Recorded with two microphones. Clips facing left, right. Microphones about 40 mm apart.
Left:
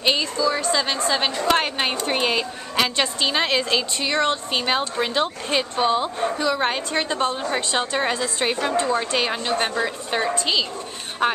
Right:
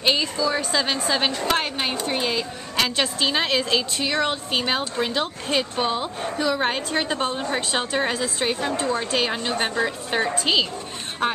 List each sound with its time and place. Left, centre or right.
0.0 s a woman's voice: centre
2.0 s a woman's voice: left
2.7 s a woman's voice: centre
10.4 s speech: centre